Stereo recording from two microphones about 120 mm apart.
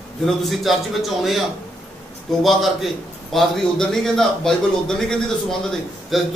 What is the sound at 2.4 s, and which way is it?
A man's voice, centre (ahead or behind).